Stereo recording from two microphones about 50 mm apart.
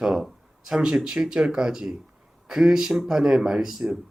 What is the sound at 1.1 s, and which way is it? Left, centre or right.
Speech, centre.